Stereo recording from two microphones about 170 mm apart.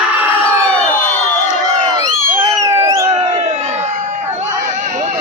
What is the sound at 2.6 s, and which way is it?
Music, 15° right (ahead or behind).